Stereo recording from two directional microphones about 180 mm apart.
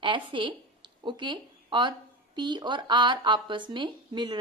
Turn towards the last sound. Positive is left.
turn(degrees=-25)  # may be behind; listen again after turning